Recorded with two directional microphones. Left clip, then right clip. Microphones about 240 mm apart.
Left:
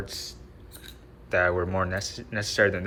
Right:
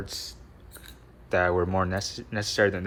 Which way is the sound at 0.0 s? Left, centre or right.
Right.